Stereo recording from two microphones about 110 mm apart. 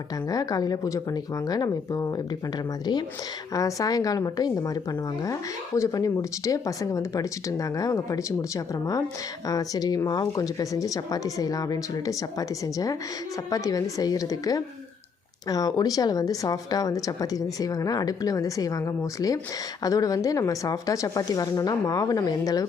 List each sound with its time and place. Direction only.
0.3 s speech: 35° left (ahead or behind)
3.5 s speech: 30° left (ahead or behind)